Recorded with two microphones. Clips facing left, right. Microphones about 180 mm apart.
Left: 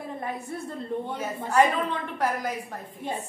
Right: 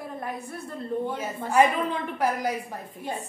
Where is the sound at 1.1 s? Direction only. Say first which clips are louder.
Even; 10° right (ahead or behind).